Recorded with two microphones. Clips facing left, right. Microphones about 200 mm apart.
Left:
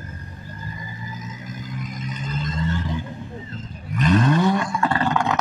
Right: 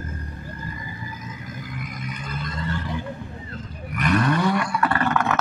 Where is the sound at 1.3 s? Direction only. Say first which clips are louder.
Left 1 dB; 20° left (ahead or behind).